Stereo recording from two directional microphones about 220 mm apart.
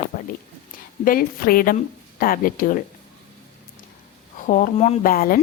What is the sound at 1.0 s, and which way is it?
A woman's voice, 40° left (ahead or behind).